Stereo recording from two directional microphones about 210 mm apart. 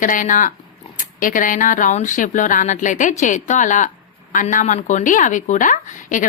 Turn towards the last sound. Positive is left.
turn(degrees=40)  # may be behind; listen again after turning